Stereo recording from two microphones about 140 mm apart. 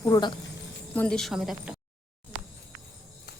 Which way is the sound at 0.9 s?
5° left (ahead or behind).